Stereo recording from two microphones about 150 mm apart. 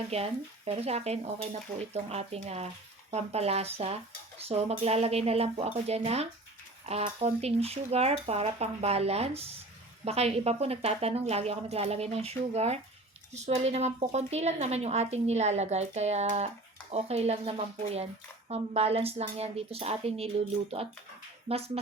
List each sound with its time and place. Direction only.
0.1 s speech: 40° right (ahead or behind)